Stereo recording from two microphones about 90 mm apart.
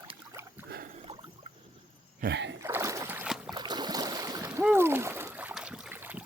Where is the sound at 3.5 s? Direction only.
50° right (ahead or behind).